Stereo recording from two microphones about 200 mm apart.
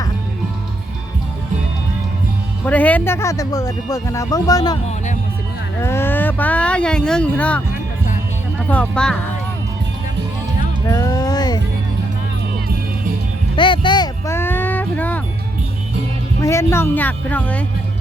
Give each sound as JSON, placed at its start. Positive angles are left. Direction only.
{"t": 2.6, "sound": "speech", "side_deg": 10}
{"t": 5.8, "sound": "speech", "side_deg": 10}
{"t": 8.7, "sound": "speech", "side_deg": 5}
{"t": 10.8, "sound": "music", "side_deg": 15}
{"t": 13.6, "sound": "music", "side_deg": 25}
{"t": 16.4, "sound": "speech", "side_deg": 15}